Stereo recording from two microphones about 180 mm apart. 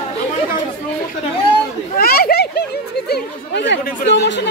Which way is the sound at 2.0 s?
55° left (ahead or behind).